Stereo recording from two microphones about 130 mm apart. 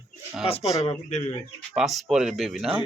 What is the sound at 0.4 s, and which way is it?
Speech, 50° left (ahead or behind).